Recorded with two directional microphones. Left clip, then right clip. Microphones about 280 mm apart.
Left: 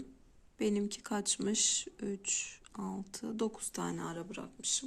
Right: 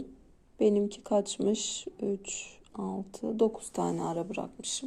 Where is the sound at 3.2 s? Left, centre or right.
Left.